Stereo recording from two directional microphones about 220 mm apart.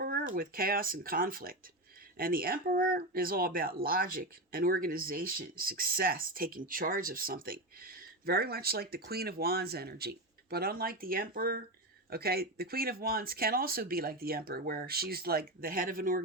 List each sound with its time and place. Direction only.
0.3 s speech: 40° right (ahead or behind)